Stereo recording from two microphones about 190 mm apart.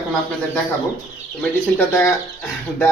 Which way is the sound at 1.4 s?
10° left (ahead or behind).